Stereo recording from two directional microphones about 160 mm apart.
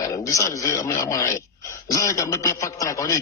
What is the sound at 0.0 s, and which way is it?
A man's voice, 20° left (ahead or behind).